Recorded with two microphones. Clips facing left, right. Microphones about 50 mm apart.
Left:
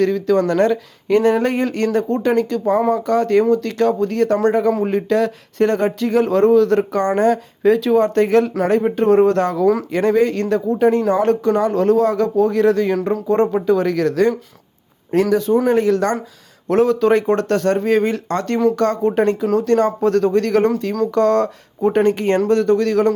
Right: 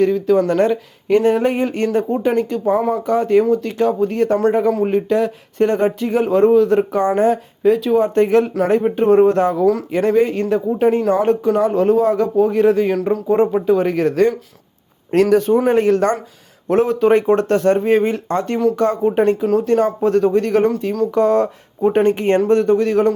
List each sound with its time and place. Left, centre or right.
0.0 s speech: centre
4.5 s speech: centre
8.1 s speech: centre
9.9 s speech: centre
13.0 s speech: centre
15.1 s a man's voice: right
16.6 s speech: centre
21.9 s speech: right